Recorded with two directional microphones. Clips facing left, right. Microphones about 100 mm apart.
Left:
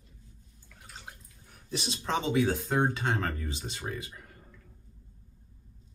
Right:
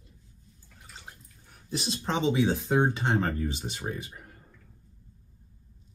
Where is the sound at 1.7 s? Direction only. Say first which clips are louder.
Right 3 dB; 40° right (ahead or behind).